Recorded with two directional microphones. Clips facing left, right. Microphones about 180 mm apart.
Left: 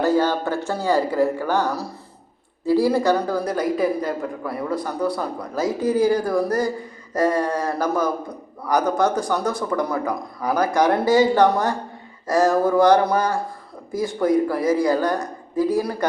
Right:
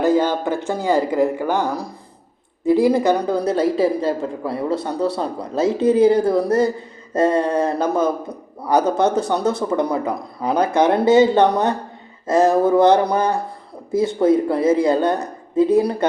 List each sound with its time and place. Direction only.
0.0 s speech: 20° right (ahead or behind)